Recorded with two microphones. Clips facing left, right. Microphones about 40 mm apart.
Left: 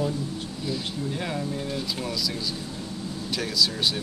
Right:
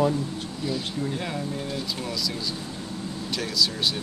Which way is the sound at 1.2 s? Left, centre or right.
Centre.